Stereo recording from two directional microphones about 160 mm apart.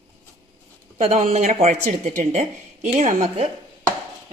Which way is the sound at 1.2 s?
45° right (ahead or behind).